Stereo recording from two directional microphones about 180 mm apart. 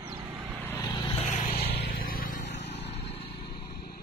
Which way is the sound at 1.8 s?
50° left (ahead or behind).